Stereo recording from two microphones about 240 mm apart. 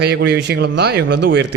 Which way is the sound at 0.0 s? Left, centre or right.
Right.